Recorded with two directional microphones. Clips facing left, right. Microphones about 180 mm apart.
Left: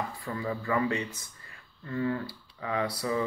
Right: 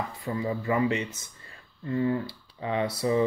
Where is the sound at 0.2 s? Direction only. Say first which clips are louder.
Right 4 dB; 20° right (ahead or behind).